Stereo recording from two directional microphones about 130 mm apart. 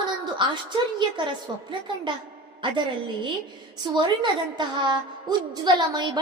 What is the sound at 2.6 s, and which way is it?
Speech, 40° right (ahead or behind).